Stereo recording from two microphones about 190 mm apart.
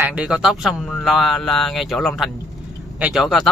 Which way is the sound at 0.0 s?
5° right (ahead or behind).